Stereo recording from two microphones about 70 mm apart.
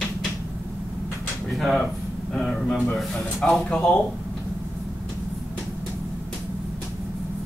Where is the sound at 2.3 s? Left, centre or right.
Centre.